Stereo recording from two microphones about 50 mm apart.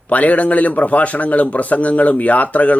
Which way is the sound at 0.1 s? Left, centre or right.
Left.